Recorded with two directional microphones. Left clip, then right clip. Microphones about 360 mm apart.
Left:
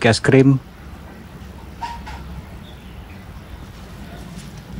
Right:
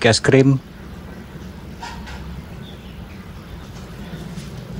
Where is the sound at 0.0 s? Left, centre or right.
Centre.